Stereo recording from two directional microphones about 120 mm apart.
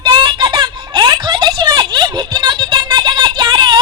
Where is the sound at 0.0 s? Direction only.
40° right (ahead or behind).